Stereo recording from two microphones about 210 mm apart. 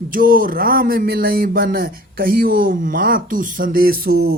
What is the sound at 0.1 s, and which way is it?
Speech, 40° right (ahead or behind).